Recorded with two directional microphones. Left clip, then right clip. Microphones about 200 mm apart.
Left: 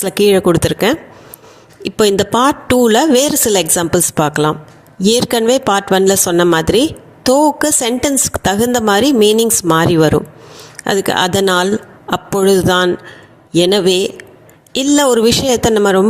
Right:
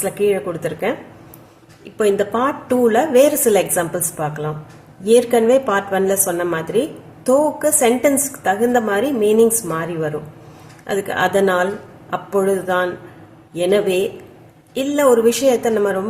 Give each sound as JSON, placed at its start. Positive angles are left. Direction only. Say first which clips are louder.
{"t": 0.0, "sound": "a woman's voice", "louder": "left 7 dB", "side_deg": 50}